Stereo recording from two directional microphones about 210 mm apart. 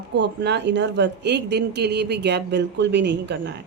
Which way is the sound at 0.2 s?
55° right (ahead or behind).